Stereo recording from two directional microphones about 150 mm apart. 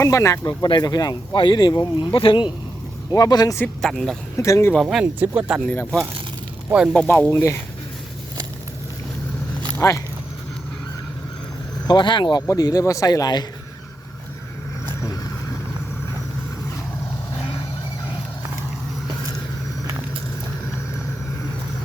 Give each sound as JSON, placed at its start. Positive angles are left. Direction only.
{"t": 0.0, "sound": "speech", "side_deg": 20}
{"t": 0.4, "sound": "speech", "side_deg": 30}
{"t": 3.8, "sound": "speech", "side_deg": 5}
{"t": 4.4, "sound": "speech", "side_deg": 20}
{"t": 4.7, "sound": "speech", "side_deg": 0}
{"t": 5.7, "sound": "speech", "side_deg": 5}
{"t": 6.7, "sound": "speech", "side_deg": -5}
{"t": 6.9, "sound": "speech", "side_deg": 10}
{"t": 9.7, "sound": "speech", "side_deg": 20}
{"t": 11.9, "sound": "speech", "side_deg": 30}
{"t": 15.0, "sound": "vehicle", "side_deg": 25}